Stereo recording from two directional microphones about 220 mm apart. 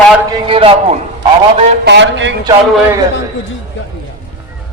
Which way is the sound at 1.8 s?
55° right (ahead or behind).